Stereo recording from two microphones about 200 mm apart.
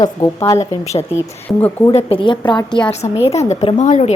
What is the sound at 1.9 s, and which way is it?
Speech, 30° left (ahead or behind).